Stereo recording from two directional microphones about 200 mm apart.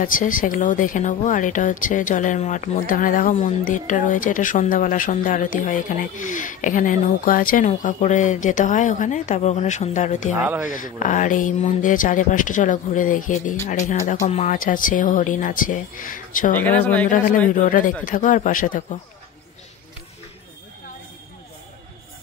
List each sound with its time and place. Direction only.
0.0 s speech: 45° left (ahead or behind)
10.3 s speech: 10° right (ahead or behind)
10.7 s speech: 40° left (ahead or behind)
16.6 s speech: 10° left (ahead or behind)
17.5 s speech: 40° left (ahead or behind)